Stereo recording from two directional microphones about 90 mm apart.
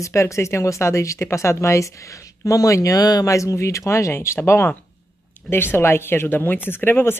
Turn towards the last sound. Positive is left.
turn(degrees=25)  # may be behind; listen again after turning